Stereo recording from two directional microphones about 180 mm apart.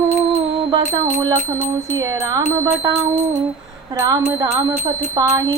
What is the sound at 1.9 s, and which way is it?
A woman's voice, 15° right (ahead or behind).